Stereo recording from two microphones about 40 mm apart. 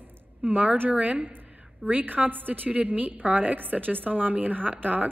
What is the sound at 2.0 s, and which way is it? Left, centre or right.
A woman's voice, right.